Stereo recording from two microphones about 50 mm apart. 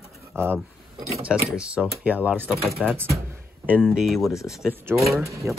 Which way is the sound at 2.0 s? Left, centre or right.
Right.